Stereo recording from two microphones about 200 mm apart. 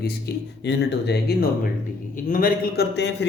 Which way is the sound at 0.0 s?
50° left (ahead or behind).